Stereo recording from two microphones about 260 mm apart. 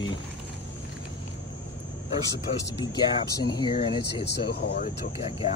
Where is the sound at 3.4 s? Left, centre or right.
Centre.